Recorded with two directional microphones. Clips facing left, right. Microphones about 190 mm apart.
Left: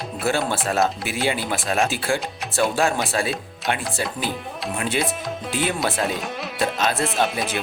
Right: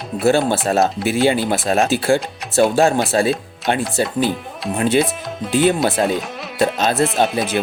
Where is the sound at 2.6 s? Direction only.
40° right (ahead or behind).